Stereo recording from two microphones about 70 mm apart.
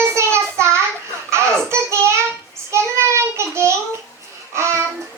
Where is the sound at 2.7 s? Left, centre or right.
Right.